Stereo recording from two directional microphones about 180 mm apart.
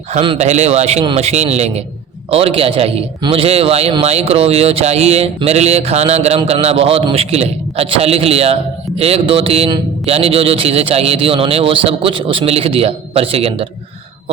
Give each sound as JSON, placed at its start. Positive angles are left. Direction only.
{"t": 0.1, "sound": "a man's voice", "side_deg": -35}